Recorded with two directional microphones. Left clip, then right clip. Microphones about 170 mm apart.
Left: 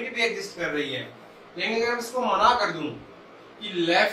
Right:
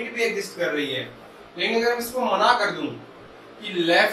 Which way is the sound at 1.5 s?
15° left (ahead or behind).